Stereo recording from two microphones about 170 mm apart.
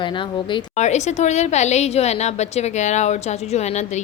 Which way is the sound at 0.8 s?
40° left (ahead or behind).